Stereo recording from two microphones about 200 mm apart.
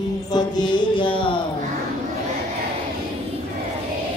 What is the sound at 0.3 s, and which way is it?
Mantra, 20° left (ahead or behind).